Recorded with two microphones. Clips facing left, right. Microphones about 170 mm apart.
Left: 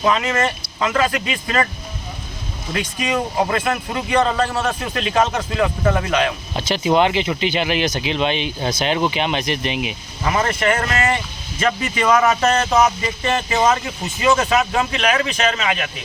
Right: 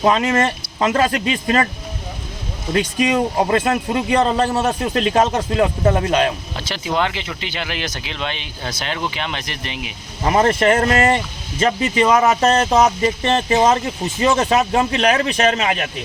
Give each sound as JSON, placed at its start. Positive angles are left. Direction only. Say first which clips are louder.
{"t": 0.0, "sound": "speech", "louder": "right 3 dB", "side_deg": -35}
{"t": 3.5, "sound": "speech", "louder": "right 4 dB", "side_deg": -30}
{"t": 6.6, "sound": "speech", "louder": "left 6 dB", "side_deg": 20}
{"t": 10.2, "sound": "speech", "louder": "right 4 dB", "side_deg": -40}